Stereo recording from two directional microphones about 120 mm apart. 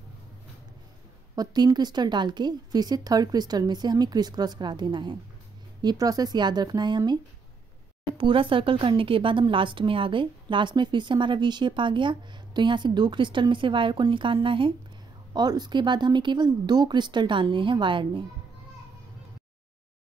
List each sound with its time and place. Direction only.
1.3 s a woman's voice: 35° right (ahead or behind)
8.2 s a woman's voice: 45° right (ahead or behind)
15.3 s a woman's voice: 35° right (ahead or behind)